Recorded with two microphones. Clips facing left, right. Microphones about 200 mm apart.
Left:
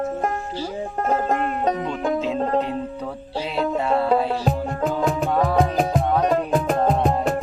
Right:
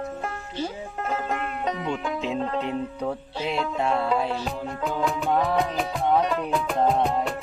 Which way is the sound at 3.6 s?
45° left (ahead or behind).